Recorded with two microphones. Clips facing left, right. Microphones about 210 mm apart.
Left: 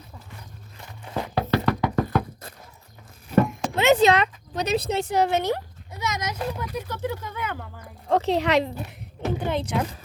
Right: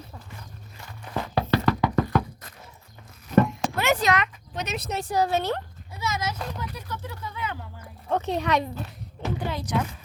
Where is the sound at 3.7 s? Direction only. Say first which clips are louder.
Left 6 dB; 25° left (ahead or behind).